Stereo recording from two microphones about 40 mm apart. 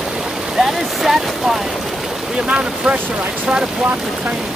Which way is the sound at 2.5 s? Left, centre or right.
Right.